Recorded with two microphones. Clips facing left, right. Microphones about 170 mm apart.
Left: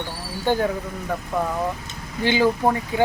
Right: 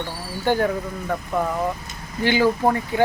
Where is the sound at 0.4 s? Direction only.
15° left (ahead or behind).